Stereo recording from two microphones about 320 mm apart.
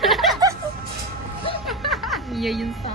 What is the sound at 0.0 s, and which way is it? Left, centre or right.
Music, centre.